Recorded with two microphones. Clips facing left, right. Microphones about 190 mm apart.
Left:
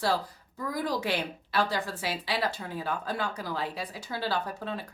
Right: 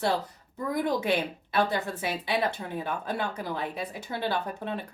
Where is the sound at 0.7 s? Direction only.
20° right (ahead or behind).